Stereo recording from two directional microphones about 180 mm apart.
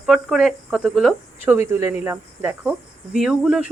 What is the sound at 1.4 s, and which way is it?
Speech, 15° right (ahead or behind).